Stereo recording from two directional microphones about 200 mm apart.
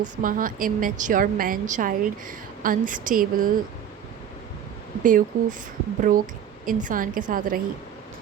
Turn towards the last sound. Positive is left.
turn(degrees=-45)  # may be behind; listen again after turning